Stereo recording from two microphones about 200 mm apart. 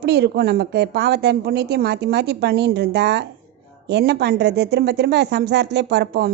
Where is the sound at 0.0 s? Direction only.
55° right (ahead or behind).